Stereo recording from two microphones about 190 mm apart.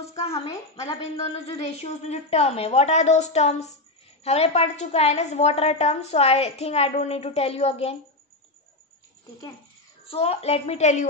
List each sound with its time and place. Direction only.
0.3 s a woman's voice: 15° left (ahead or behind)
1.3 s a woman's voice: 35° left (ahead or behind)
10.0 s a woman's voice: 30° left (ahead or behind)